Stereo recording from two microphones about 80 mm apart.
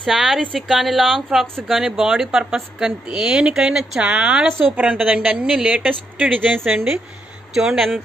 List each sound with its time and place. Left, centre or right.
0.0 s speech: centre
4.5 s speech: right
6.6 s speech: centre